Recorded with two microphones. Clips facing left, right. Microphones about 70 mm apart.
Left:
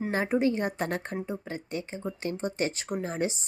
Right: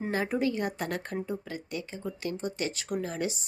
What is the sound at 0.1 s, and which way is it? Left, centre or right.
A woman's voice, left.